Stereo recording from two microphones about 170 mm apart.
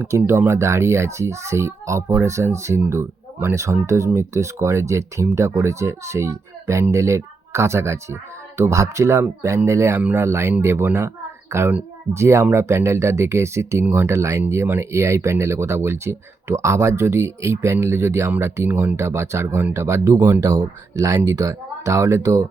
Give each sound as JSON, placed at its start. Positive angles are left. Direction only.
{"t": 0.0, "sound": "a child's voice", "side_deg": -15}